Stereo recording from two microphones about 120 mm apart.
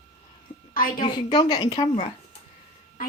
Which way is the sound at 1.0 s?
35° left (ahead or behind).